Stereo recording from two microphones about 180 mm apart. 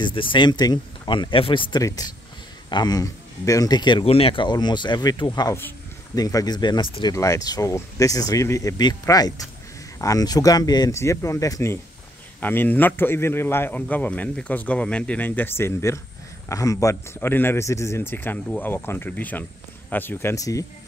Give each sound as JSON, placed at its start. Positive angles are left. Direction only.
{"t": 0.0, "sound": "a man's voice", "side_deg": 30}